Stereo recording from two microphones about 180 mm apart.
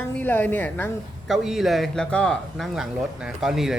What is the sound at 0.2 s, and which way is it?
Speech, 10° left (ahead or behind).